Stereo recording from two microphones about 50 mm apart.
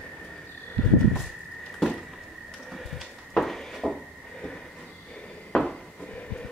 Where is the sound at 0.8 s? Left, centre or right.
Left.